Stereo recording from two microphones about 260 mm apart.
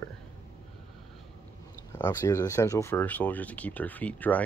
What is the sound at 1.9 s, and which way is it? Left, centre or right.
Speech, centre.